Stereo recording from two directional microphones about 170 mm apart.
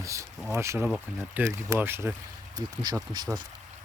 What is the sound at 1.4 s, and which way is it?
Speech, 15° right (ahead or behind).